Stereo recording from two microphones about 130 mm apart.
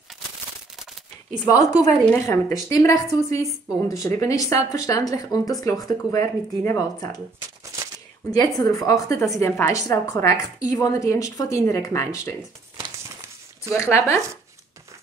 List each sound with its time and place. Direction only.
1.5 s a woman's voice: 25° left (ahead or behind)
8.3 s a woman's voice: 30° left (ahead or behind)
13.7 s a woman's voice: 20° left (ahead or behind)